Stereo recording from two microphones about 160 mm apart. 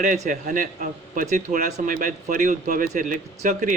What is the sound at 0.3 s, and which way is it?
A man's voice, 55° right (ahead or behind).